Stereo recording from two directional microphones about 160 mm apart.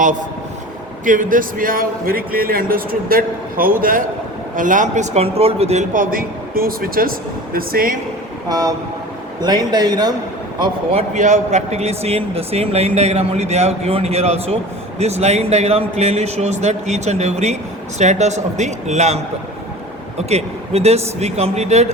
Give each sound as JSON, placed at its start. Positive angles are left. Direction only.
{"t": 1.0, "sound": "a man's voice", "side_deg": -55}
{"t": 5.9, "sound": "a man's voice", "side_deg": -60}
{"t": 8.4, "sound": "speech", "side_deg": -25}
{"t": 11.1, "sound": "a man's voice", "side_deg": -50}